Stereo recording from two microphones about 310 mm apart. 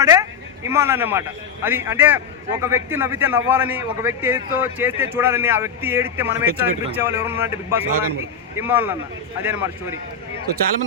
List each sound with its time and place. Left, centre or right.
0.0 s a man's voice: centre